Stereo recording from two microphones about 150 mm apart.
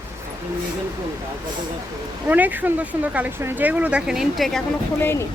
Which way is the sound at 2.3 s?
10° right (ahead or behind).